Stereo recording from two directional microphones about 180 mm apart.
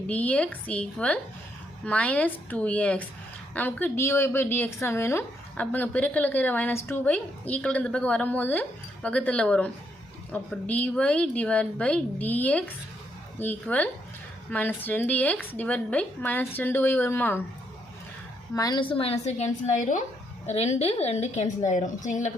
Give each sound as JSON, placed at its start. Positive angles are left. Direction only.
{"t": 0.1, "sound": "a woman's voice", "side_deg": 10}
{"t": 18.5, "sound": "a woman's voice", "side_deg": 20}